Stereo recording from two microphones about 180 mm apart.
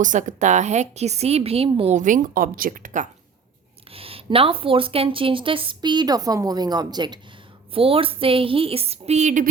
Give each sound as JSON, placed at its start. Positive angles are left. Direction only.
{"t": 0.0, "sound": "a woman's voice", "side_deg": -45}
{"t": 3.9, "sound": "a woman's voice", "side_deg": -30}